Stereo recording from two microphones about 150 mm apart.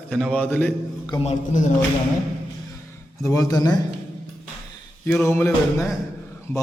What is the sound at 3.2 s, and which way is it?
Speech, 20° left (ahead or behind).